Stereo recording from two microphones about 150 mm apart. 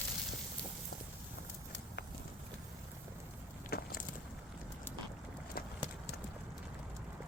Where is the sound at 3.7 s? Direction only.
75° left (ahead or behind).